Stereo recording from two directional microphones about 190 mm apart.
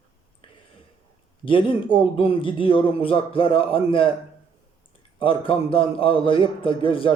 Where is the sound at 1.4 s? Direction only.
25° left (ahead or behind).